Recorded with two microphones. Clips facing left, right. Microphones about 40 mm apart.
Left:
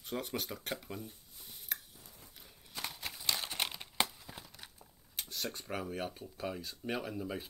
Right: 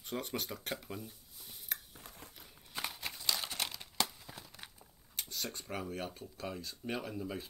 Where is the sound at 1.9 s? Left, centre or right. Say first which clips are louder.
Right 5 dB; right.